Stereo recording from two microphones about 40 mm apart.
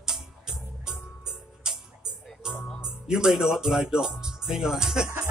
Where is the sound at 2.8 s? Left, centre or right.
Centre.